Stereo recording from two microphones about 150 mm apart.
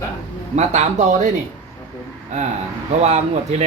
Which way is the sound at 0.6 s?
55° right (ahead or behind).